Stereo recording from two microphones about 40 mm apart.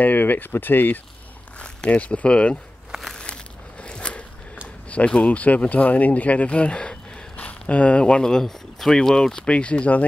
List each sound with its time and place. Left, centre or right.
0.0 s speech: left
1.6 s speech: left
2.2 s speech: left
3.8 s a sound: left
4.8 s speech: left
5.3 s speech: left
7.3 s speech: left; by 9.5 s centre
9.5 s speech: left